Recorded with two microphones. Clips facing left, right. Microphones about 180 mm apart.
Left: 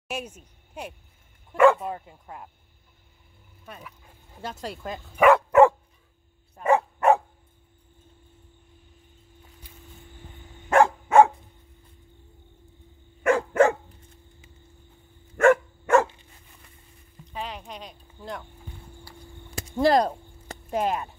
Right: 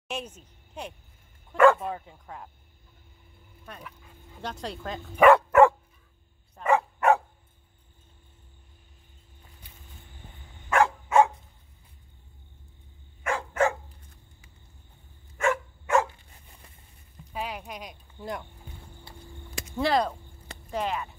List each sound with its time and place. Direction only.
0.1 s a woman's voice: 10° left (ahead or behind)
3.6 s speech: 5° left (ahead or behind)
5.5 s dog: 15° left (ahead or behind)
6.6 s dog: 35° left (ahead or behind)
10.7 s dog: 45° left (ahead or behind)
13.2 s dog: 55° left (ahead or behind)
15.3 s dog: 55° left (ahead or behind)
17.3 s a sound: 10° right (ahead or behind)
19.1 s a sound: 25° right (ahead or behind)
19.6 s a sound: 40° left (ahead or behind)